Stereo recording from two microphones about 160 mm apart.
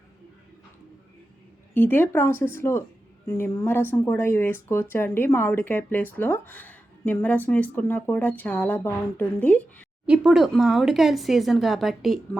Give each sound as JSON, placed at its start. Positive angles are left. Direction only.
{"t": 1.7, "sound": "speech", "side_deg": 10}
{"t": 10.1, "sound": "speech", "side_deg": -5}